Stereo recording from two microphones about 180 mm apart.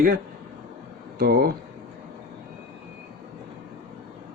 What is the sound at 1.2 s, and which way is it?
Speech, 60° right (ahead or behind).